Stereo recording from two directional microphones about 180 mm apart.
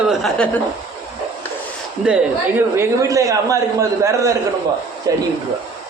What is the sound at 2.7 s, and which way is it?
A man's voice, 15° right (ahead or behind).